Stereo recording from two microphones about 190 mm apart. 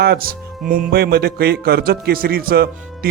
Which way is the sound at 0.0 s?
55° right (ahead or behind).